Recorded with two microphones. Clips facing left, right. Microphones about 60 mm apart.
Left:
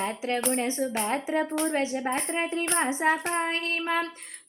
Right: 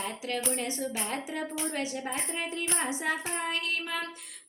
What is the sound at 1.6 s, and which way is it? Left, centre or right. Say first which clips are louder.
Child singing: left 6 dB; left.